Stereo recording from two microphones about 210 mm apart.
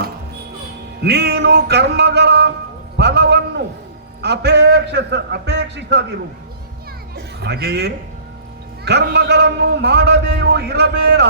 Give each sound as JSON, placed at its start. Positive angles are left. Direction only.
{"t": 1.0, "sound": "a man's voice", "side_deg": -50}
{"t": 3.0, "sound": "a sound", "side_deg": -55}
{"t": 4.2, "sound": "a man's voice", "side_deg": -50}
{"t": 7.3, "sound": "a man's voice", "side_deg": -50}